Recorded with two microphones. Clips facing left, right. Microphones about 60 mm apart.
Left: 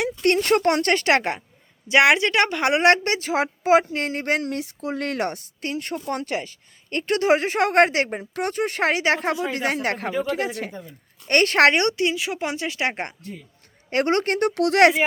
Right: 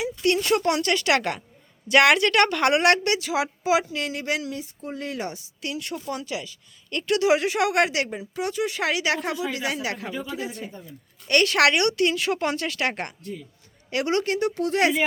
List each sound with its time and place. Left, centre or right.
0.0 s a woman's voice: left
5.6 s a woman's voice: left
10.2 s speech: left
11.3 s a woman's voice: left
12.0 s speech: centre; by 13.4 s left
13.9 s speech: left